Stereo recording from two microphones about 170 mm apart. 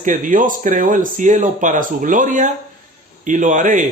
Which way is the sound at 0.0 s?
50° right (ahead or behind).